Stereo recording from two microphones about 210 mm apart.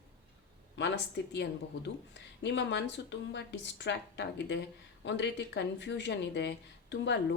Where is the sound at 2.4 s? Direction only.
55° left (ahead or behind).